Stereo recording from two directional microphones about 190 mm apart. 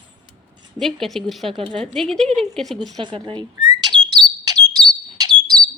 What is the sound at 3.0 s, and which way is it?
Speech, 25° right (ahead or behind).